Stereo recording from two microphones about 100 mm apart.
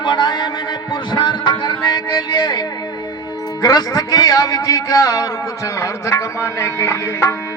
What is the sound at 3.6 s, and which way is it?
A man's voice, 40° left (ahead or behind).